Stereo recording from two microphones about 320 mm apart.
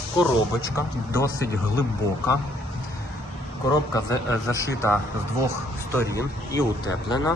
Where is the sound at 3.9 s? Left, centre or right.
Centre.